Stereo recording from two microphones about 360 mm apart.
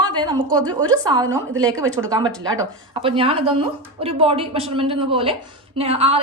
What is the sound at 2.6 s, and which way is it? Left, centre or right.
A woman's voice, centre.